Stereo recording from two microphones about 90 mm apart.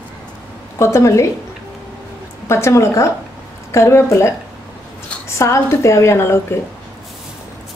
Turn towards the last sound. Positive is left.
turn(degrees=30)  # may be behind; listen again after turning